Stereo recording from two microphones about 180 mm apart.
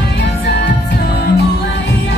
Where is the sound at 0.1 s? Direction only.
70° left (ahead or behind).